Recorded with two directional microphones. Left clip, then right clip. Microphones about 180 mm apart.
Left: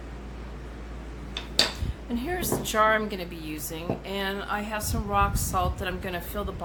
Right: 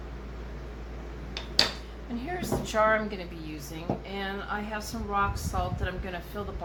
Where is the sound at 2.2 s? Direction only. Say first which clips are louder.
Left 3 dB; 45° left (ahead or behind).